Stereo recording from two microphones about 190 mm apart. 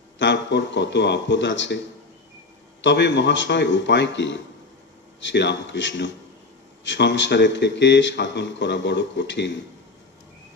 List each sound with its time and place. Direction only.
0.2 s a man's voice: 70° left (ahead or behind)
2.8 s a man's voice: 65° left (ahead or behind)